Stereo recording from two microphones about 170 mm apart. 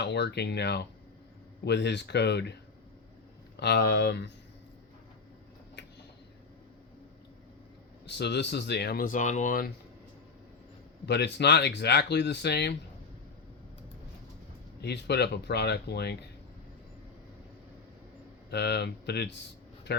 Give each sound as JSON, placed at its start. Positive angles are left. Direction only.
{"t": 0.0, "sound": "speech", "side_deg": 80}
{"t": 3.6, "sound": "speech", "side_deg": 75}
{"t": 8.0, "sound": "speech", "side_deg": 90}
{"t": 11.0, "sound": "speech", "side_deg": 80}
{"t": 14.8, "sound": "speech", "side_deg": 75}
{"t": 18.5, "sound": "speech", "side_deg": 80}